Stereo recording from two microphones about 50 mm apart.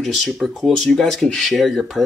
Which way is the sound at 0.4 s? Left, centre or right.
Centre.